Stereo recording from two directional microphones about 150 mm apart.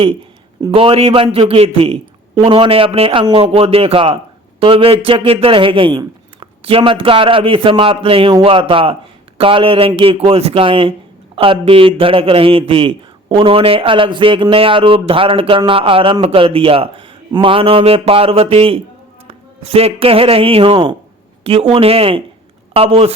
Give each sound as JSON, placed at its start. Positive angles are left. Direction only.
{"t": 0.7, "sound": "a man's voice", "side_deg": -40}